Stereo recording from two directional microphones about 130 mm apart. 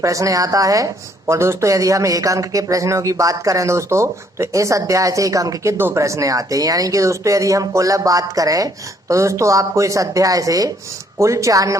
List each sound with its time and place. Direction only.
0.0 s speech: 25° right (ahead or behind)